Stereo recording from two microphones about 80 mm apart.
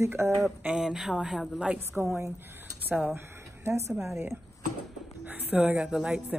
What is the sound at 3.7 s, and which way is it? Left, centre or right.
Speech, right.